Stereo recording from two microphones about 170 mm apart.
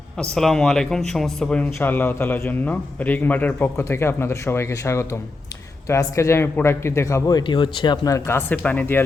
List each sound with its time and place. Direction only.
0.2 s speech: centre (ahead or behind)